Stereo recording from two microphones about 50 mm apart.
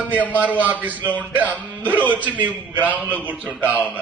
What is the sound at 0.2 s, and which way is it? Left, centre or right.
Speech, left.